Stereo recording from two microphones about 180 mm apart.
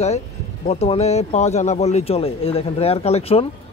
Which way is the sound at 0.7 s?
35° left (ahead or behind).